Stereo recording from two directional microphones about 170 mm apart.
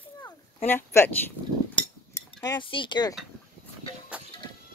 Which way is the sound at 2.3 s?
25° left (ahead or behind).